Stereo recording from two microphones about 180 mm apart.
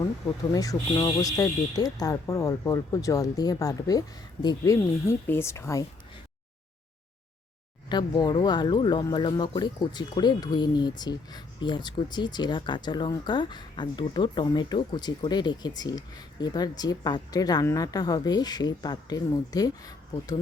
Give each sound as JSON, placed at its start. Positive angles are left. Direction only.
{"t": 0.5, "sound": "speech", "side_deg": 20}
{"t": 7.9, "sound": "speech", "side_deg": 25}